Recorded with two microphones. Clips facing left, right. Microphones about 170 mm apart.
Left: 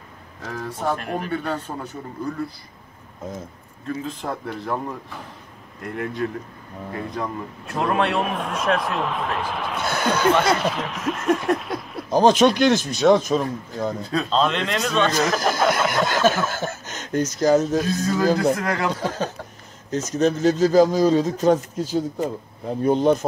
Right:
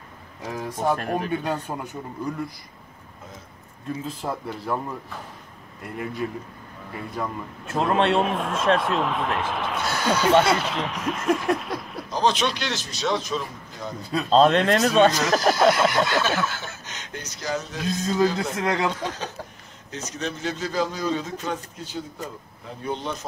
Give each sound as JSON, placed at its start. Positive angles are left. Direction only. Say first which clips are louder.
{"t": 0.5, "sound": "speech", "louder": "right 1 dB", "side_deg": -15}
{"t": 4.2, "sound": "speech", "louder": "left 1 dB", "side_deg": -5}
{"t": 7.8, "sound": "a man's voice", "louder": "right 1 dB", "side_deg": -30}
{"t": 8.2, "sound": "speech", "louder": "right 1 dB", "side_deg": 0}
{"t": 9.8, "sound": "speech", "louder": "left 2 dB", "side_deg": 55}
{"t": 10.3, "sound": "speech", "louder": "right 1 dB", "side_deg": 0}
{"t": 12.1, "sound": "speech", "louder": "left 8 dB", "side_deg": 50}
{"t": 14.3, "sound": "speech", "louder": "right 6 dB", "side_deg": -40}
{"t": 15.1, "sound": "speech", "louder": "even", "side_deg": 50}
{"t": 17.8, "sound": "a man's voice", "louder": "left 3 dB", "side_deg": -20}
{"t": 18.2, "sound": "speech", "louder": "left 4 dB", "side_deg": 40}
{"t": 18.6, "sound": "a man's voice", "louder": "even", "side_deg": -25}
{"t": 19.0, "sound": "speech", "louder": "left 5 dB", "side_deg": 45}